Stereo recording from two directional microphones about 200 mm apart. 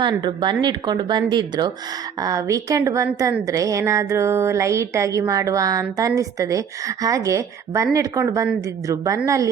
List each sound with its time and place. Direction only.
0.0 s a woman's voice: 20° right (ahead or behind)